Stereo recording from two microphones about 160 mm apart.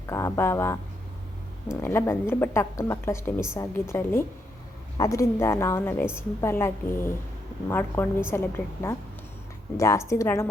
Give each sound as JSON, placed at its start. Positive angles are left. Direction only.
{"t": 0.1, "sound": "a woman's voice", "side_deg": 20}
{"t": 1.8, "sound": "a woman's voice", "side_deg": 15}